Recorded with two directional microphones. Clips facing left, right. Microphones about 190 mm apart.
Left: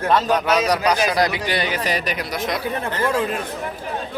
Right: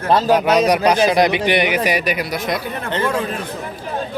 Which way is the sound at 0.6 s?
20° right (ahead or behind).